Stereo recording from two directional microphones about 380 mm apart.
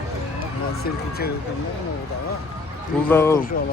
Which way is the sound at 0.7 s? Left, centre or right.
Left.